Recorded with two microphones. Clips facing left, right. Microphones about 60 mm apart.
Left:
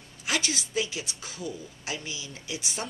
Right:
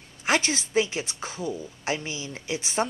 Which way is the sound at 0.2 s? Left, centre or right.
Right.